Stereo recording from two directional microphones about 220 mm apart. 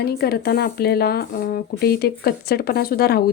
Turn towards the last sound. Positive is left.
turn(degrees=45)  # may be behind; listen again after turning